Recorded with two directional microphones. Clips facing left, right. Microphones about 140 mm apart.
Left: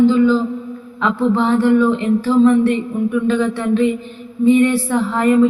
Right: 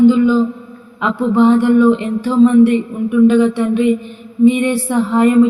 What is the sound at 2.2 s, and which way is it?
Speech, 15° right (ahead or behind).